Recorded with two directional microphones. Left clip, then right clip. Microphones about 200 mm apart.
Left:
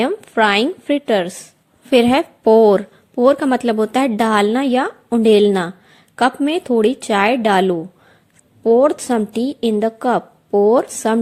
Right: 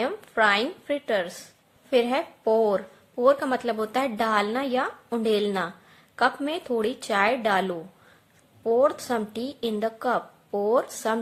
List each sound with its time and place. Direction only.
0.0 s a woman's voice: 35° left (ahead or behind)